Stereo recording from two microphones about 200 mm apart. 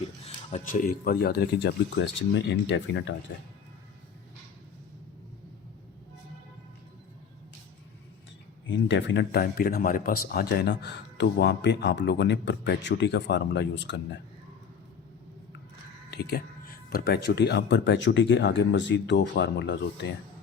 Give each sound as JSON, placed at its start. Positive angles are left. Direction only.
{"t": 0.5, "sound": "speech", "side_deg": 40}
{"t": 8.7, "sound": "speech", "side_deg": 65}
{"t": 16.0, "sound": "speech", "side_deg": 55}